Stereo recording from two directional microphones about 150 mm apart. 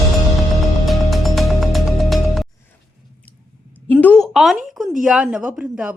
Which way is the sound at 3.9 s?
10° left (ahead or behind).